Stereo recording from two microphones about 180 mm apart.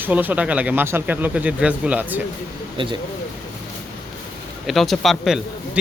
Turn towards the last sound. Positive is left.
turn(degrees=0)  # may be behind; listen again after turning